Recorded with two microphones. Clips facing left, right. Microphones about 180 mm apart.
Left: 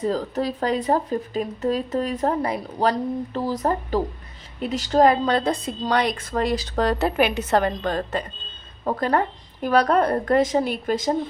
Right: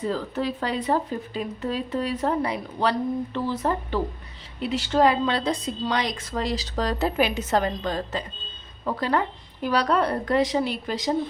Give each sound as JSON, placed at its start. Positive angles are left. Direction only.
{"t": 0.0, "sound": "a woman's voice", "side_deg": 40}
{"t": 8.8, "sound": "speech", "side_deg": 45}